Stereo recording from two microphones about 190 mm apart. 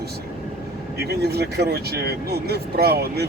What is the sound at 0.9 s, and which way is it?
Speech, 60° right (ahead or behind).